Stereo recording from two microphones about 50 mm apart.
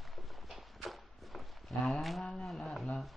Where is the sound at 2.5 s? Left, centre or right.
Centre.